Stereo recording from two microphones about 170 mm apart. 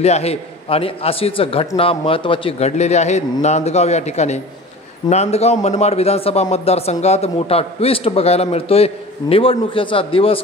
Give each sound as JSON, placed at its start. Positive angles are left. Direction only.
{"t": 0.0, "sound": "speech", "side_deg": 40}